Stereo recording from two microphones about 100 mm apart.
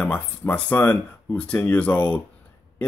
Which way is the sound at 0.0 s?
15° left (ahead or behind).